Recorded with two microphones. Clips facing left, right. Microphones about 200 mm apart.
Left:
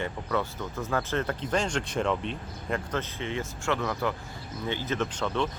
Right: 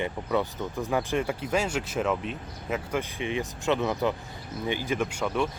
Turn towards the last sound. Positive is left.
turn(degrees=-10)  # may be behind; listen again after turning